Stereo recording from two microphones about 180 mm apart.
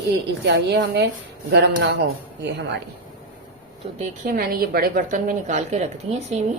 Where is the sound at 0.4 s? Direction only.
70° right (ahead or behind).